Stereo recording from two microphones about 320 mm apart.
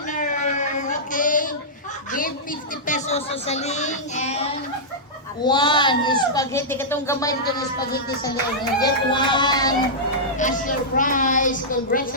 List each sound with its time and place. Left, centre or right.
0.1 s a sound: left
2.8 s speech: left
10.3 s a woman's voice: left